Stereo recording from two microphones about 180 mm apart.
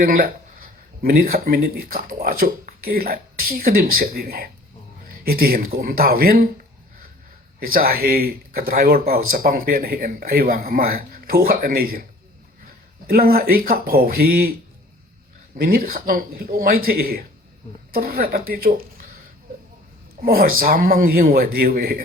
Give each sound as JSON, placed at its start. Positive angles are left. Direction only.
{"t": 0.0, "sound": "speech", "side_deg": -50}
{"t": 7.6, "sound": "speech", "side_deg": -55}
{"t": 13.1, "sound": "speech", "side_deg": -55}
{"t": 15.5, "sound": "speech", "side_deg": -55}
{"t": 20.2, "sound": "a man's voice", "side_deg": -55}